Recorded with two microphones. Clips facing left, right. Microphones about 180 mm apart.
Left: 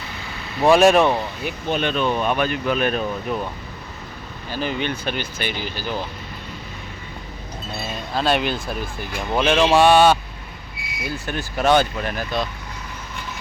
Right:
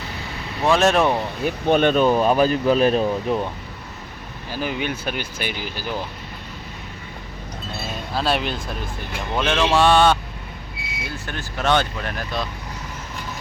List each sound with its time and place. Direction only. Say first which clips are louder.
0.6 s speech: left 4 dB; 15° left (ahead or behind)
1.5 s speech: right 7 dB; 50° right (ahead or behind); by 3.4 s 30° right (ahead or behind)
4.5 s speech: left 1 dB; 10° right (ahead or behind)
8.1 s speech: left 2 dB; centre (ahead or behind)
10.8 s vehicle: right 1 dB; 25° right (ahead or behind)
11.3 s speech: left 3 dB; 15° left (ahead or behind)